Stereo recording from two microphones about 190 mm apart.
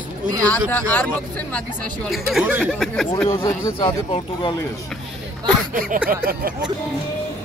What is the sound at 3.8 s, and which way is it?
Speech, 25° left (ahead or behind).